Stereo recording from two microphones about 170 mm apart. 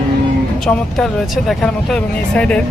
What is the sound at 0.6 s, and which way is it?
Speech, 5° left (ahead or behind).